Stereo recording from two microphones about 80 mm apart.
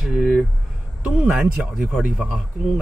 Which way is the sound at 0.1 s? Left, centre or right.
Centre.